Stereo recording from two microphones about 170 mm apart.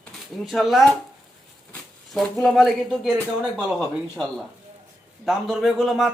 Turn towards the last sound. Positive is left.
turn(degrees=0)  # may be behind; listen again after turning